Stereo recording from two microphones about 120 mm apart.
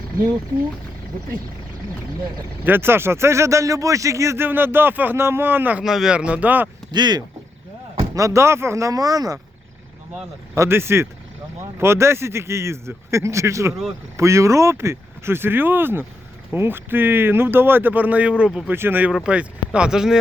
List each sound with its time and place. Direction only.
2.6 s speech: 20° right (ahead or behind)
5.8 s speech: 5° right (ahead or behind)
6.9 s speech: 35° right (ahead or behind)
8.1 s speech: 25° right (ahead or behind)
10.5 s speech: 20° right (ahead or behind); by 20.1 s 5° right (ahead or behind)